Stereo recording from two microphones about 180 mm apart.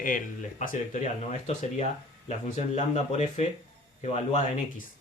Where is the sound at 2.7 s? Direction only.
40° left (ahead or behind).